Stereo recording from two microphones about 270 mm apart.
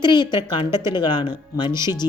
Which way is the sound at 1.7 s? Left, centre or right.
Centre.